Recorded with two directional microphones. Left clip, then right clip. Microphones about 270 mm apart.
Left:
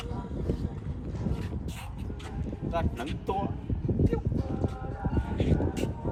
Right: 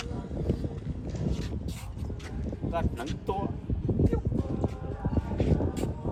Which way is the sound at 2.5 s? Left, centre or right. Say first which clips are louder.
Even; centre.